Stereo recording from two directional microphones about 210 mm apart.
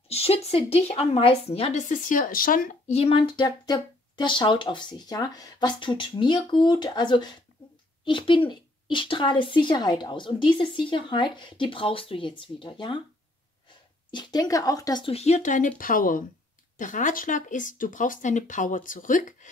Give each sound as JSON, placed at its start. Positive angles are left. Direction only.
{"t": 0.1, "sound": "a woman's voice", "side_deg": 30}
{"t": 14.1, "sound": "a woman's voice", "side_deg": 20}